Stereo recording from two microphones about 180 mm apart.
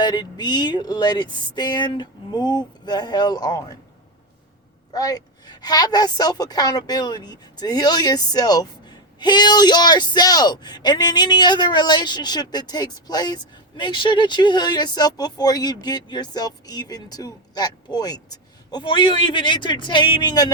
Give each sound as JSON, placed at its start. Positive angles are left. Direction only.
{"t": 0.0, "sound": "a woman's voice", "side_deg": 25}
{"t": 4.9, "sound": "a woman's voice", "side_deg": 20}